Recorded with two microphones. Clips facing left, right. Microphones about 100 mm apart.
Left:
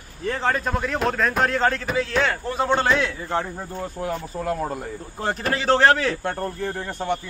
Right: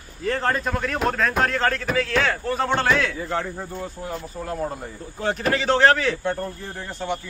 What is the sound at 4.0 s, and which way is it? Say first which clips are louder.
Speech: left 5 dB; 60° left (ahead or behind).